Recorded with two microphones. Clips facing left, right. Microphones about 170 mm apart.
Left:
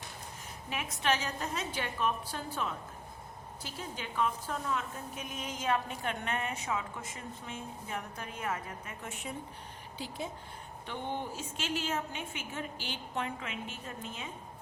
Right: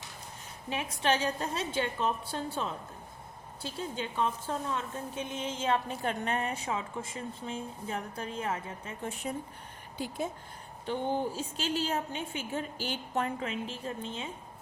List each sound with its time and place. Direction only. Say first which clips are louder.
0.7 s a woman's voice: right 3 dB; 30° right (ahead or behind)
10.8 s a woman's voice: right 7 dB; 35° right (ahead or behind)